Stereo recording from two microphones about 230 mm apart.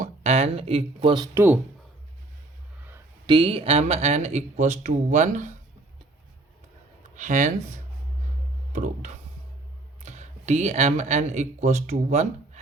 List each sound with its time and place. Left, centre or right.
0.0 s speech: right; by 1.5 s centre
2.8 s a sound: centre
3.3 s speech: right
7.2 s speech: right
8.7 s music: right
10.0 s speech: right